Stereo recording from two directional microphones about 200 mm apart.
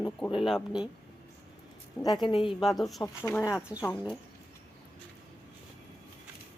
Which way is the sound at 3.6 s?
5° right (ahead or behind).